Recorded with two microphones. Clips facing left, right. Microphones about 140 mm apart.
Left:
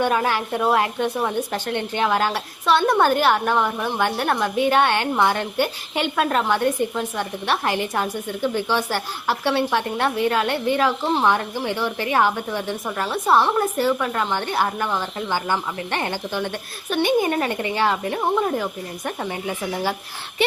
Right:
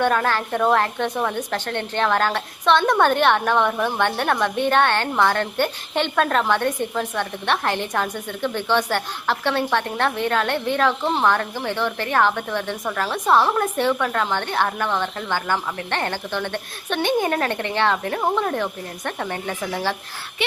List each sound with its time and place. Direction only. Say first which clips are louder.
0.0 s a woman's voice: even; 10° left (ahead or behind)